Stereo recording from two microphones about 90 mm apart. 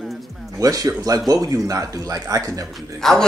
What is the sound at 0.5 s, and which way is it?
Speech, 40° right (ahead or behind).